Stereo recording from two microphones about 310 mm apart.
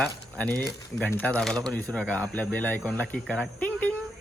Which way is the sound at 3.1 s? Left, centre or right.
Centre.